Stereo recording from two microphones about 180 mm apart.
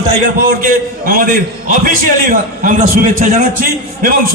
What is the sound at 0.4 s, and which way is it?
A man's voice, 55° right (ahead or behind).